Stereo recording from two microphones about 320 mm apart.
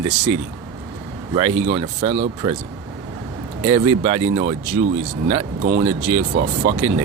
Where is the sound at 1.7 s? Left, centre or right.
Centre.